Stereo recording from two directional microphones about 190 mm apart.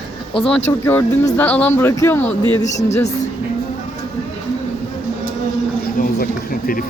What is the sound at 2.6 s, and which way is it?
Speech, 35° left (ahead or behind).